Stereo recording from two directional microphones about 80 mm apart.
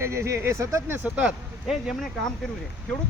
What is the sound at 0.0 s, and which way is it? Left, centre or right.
Speech, right.